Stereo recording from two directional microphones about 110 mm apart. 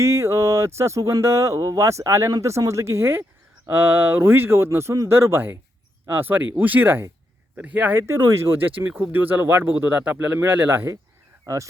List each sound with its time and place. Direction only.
0.0 s speech: 25° right (ahead or behind)